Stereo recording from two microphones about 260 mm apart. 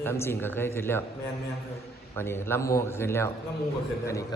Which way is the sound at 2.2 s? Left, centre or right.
Centre.